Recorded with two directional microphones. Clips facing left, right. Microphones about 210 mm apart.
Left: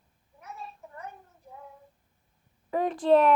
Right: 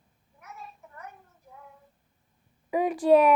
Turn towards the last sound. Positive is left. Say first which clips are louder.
# right 2 dB
turn(degrees=-10)  # may be behind; listen again after turning